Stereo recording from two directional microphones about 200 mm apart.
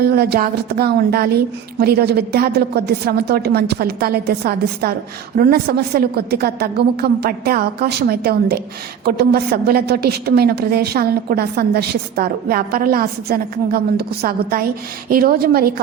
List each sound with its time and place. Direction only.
0.0 s a woman's voice: 50° right (ahead or behind)